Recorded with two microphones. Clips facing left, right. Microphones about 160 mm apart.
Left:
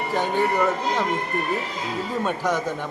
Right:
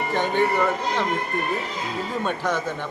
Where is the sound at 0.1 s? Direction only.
5° left (ahead or behind).